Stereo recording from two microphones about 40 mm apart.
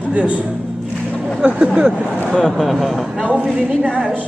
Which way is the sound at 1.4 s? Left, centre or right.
Right.